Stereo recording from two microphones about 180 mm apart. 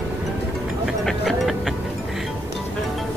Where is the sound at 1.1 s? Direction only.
Centre (ahead or behind).